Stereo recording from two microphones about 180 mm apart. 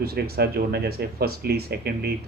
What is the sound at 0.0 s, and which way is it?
Speech, 60° right (ahead or behind).